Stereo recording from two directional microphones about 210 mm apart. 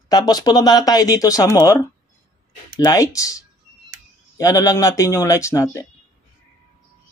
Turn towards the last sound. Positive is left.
turn(degrees=15)  # may be behind; listen again after turning